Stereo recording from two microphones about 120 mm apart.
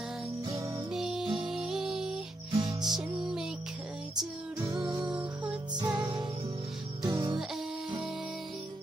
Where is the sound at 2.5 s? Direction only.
35° right (ahead or behind).